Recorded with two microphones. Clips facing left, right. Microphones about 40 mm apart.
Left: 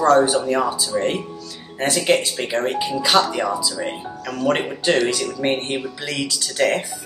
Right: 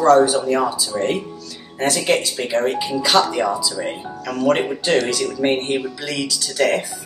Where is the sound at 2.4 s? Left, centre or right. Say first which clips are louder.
Right 2 dB; centre.